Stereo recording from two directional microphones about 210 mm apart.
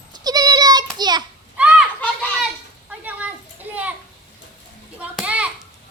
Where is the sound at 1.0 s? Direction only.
20° right (ahead or behind).